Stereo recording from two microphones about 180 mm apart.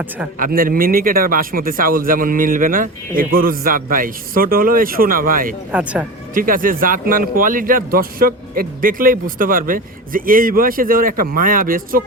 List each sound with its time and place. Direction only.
0.3 s speech: 50° right (ahead or behind)
5.7 s speech: 5° right (ahead or behind)
6.3 s speech: 50° right (ahead or behind)